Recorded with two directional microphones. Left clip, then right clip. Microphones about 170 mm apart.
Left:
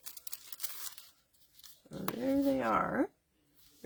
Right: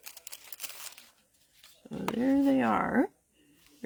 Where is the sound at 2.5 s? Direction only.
45° right (ahead or behind).